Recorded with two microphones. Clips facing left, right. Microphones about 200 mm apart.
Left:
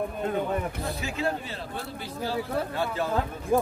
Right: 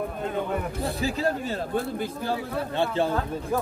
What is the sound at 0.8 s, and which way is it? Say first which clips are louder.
A man's voice: right 4 dB; 35° right (ahead or behind).